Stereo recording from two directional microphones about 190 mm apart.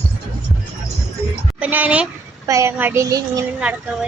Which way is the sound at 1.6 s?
10° right (ahead or behind).